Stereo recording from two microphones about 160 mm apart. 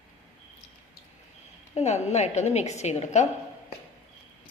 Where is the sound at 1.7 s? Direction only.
45° left (ahead or behind).